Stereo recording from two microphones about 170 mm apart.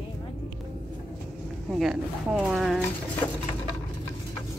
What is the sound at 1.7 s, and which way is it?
Speech, 5° right (ahead or behind).